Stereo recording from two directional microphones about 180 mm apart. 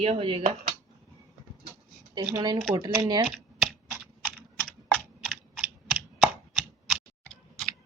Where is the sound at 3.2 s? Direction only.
Centre (ahead or behind).